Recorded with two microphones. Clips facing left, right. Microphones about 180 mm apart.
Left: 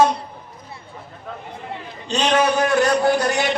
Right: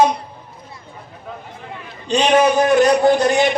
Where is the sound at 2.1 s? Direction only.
15° right (ahead or behind).